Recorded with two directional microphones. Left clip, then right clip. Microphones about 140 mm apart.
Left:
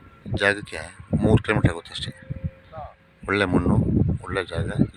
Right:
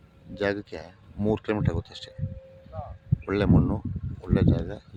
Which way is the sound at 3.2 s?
15° right (ahead or behind).